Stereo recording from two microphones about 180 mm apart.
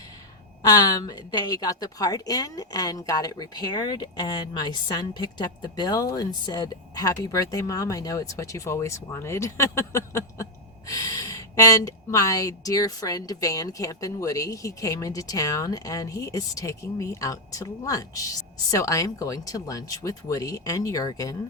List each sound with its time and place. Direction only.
0.6 s speech: 20° left (ahead or behind)